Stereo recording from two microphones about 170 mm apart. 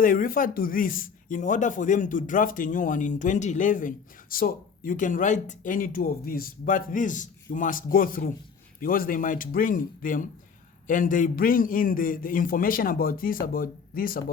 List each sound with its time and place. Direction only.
0.0 s a man's voice: 55° left (ahead or behind)